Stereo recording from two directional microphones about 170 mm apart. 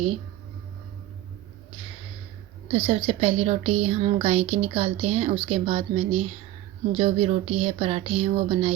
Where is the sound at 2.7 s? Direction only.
35° right (ahead or behind).